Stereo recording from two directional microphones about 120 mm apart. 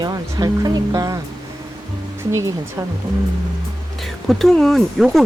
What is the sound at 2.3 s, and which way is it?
Speech, 25° right (ahead or behind).